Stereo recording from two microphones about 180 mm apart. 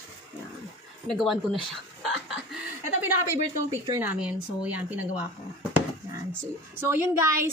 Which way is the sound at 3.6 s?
15° right (ahead or behind).